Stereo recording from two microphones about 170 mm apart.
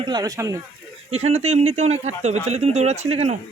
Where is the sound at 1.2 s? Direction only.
40° right (ahead or behind).